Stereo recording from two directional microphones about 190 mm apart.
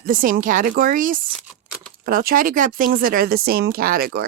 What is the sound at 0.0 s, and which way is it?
Speech, 45° right (ahead or behind).